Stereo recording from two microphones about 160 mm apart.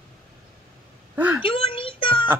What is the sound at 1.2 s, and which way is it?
Speech, 10° right (ahead or behind).